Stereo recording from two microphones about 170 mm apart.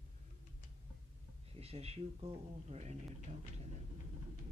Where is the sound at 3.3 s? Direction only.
45° right (ahead or behind).